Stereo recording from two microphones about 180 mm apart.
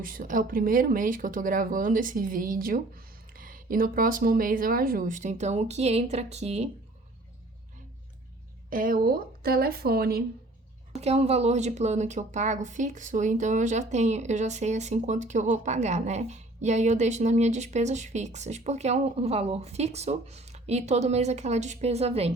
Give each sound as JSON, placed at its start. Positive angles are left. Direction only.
{"t": 0.0, "sound": "speech", "side_deg": -50}
{"t": 8.7, "sound": "a woman's voice", "side_deg": -50}
{"t": 10.9, "sound": "speech", "side_deg": -35}